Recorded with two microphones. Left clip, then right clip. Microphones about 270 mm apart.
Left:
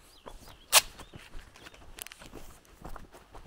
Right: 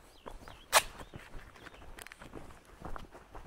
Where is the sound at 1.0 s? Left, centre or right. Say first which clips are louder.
Even; centre.